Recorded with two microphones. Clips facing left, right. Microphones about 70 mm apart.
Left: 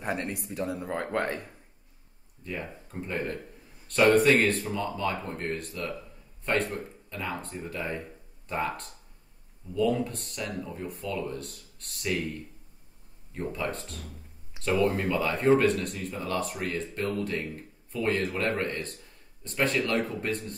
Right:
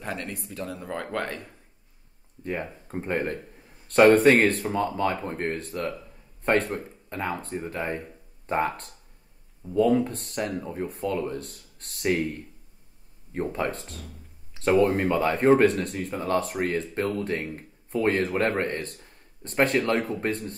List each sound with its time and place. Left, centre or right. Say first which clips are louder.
0.0 s speech: left 2 dB; left
2.4 s a man's voice: right 5 dB; right
13.3 s speech: right 4 dB; right